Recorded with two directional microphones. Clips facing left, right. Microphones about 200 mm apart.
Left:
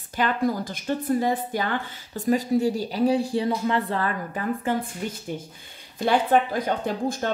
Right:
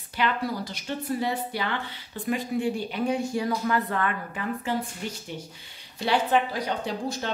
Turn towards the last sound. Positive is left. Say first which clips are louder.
# left 4 dB
turn(degrees=50)  # may be behind; listen again after turning